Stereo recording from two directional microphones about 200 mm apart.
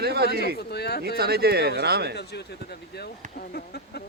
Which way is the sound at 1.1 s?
50° right (ahead or behind).